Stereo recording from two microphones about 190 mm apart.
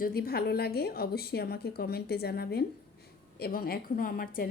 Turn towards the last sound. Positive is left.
turn(degrees=50)  # may be behind; listen again after turning